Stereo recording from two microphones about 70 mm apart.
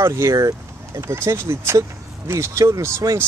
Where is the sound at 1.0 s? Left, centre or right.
Right.